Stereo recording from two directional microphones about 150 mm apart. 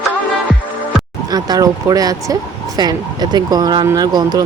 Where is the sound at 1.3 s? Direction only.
25° right (ahead or behind).